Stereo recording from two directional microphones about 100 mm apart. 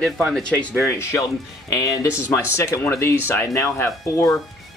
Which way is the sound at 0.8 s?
25° left (ahead or behind).